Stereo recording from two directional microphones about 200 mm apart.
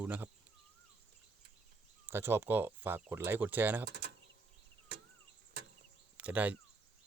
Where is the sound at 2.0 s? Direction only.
10° right (ahead or behind).